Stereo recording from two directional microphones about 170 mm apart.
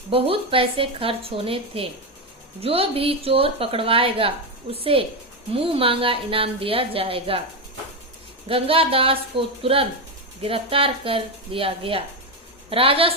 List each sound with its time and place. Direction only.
0.1 s a woman's voice: 35° right (ahead or behind)
8.4 s a woman's voice: 35° right (ahead or behind)